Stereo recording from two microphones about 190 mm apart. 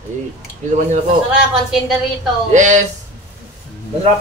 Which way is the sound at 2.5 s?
40° right (ahead or behind).